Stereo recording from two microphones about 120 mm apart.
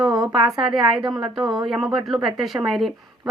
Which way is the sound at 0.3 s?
35° right (ahead or behind).